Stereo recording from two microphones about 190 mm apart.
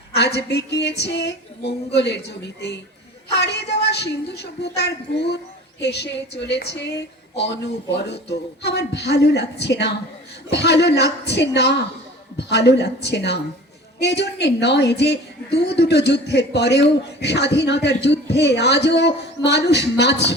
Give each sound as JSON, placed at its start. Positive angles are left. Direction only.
{"t": 0.2, "sound": "a woman's voice", "side_deg": 60}